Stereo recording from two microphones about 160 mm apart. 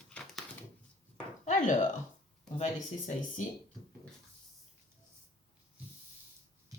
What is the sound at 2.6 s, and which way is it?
Speech, 50° left (ahead or behind).